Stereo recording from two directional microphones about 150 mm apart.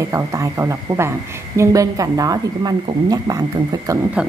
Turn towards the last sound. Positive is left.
turn(degrees=-25)  # may be behind; listen again after turning